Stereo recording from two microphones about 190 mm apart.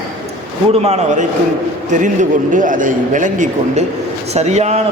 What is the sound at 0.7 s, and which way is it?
Speech, 35° right (ahead or behind).